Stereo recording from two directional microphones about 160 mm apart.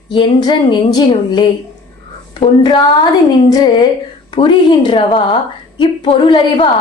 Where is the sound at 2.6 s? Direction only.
30° left (ahead or behind).